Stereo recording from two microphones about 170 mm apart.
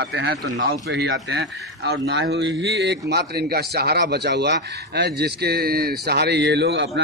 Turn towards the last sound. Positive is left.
turn(degrees=-90)